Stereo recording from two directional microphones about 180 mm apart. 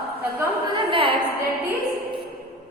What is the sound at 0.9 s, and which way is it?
Speech, 30° right (ahead or behind).